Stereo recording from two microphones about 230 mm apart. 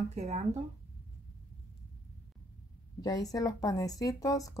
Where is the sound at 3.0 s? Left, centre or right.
Centre.